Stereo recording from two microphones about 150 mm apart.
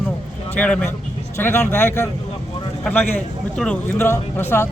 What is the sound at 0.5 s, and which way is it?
Speech, 10° left (ahead or behind).